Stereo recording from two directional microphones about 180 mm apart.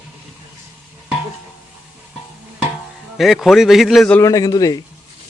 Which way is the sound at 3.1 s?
Centre (ahead or behind).